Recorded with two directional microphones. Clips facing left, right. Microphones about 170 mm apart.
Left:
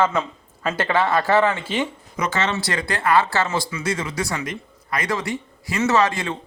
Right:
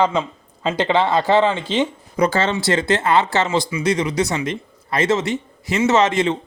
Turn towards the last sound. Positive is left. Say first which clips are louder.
# right 4 dB
turn(degrees=-20)  # may be behind; listen again after turning